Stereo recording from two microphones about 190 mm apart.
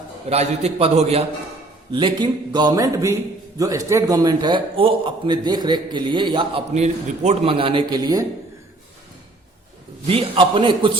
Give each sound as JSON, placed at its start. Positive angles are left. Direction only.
{"t": 0.3, "sound": "a man's voice", "side_deg": -35}
{"t": 6.7, "sound": "a man's voice", "side_deg": -35}
{"t": 10.1, "sound": "a man's voice", "side_deg": -30}